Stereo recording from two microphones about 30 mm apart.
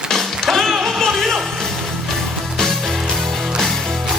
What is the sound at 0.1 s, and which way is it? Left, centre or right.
Music, centre.